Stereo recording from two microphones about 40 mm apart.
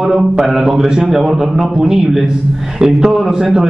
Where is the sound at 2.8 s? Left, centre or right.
Centre.